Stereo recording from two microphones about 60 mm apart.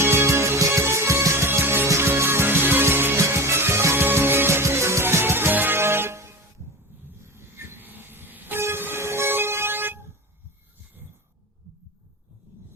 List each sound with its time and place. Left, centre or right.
0.0 s music: right
7.3 s train: right